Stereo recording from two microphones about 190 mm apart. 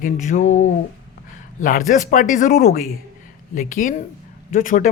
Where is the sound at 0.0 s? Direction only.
45° left (ahead or behind).